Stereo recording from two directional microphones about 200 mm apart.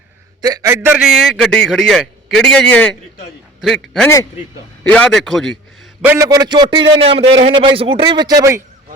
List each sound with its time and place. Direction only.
0.4 s a man's voice: 15° right (ahead or behind); by 5.9 s centre (ahead or behind)
6.1 s a man's voice: 15° right (ahead or behind)